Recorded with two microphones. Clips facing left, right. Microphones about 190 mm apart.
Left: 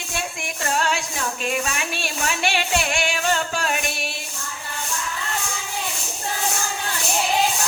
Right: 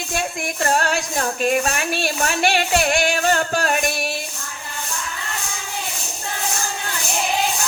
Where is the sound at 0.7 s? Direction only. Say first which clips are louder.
Right 1 dB; 45° right (ahead or behind).